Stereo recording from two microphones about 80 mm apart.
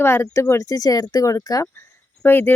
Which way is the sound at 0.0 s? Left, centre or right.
Left.